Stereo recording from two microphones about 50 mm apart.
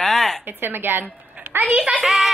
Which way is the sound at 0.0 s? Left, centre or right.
Centre.